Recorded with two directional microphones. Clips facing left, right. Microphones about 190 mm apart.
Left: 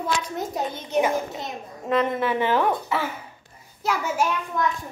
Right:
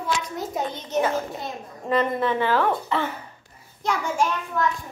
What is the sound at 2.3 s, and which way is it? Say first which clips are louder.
Speech: left 1 dB; 15° left (ahead or behind).